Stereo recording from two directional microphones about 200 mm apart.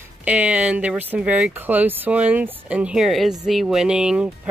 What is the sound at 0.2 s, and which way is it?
Speech, 5° right (ahead or behind).